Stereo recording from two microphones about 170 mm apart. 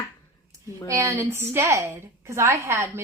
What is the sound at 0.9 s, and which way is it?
A woman's voice, 15° right (ahead or behind).